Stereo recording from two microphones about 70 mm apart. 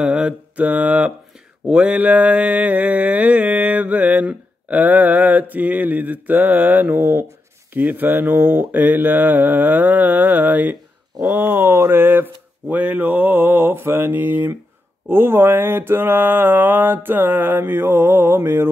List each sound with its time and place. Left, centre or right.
0.0 s mantra: centre; by 18.7 s right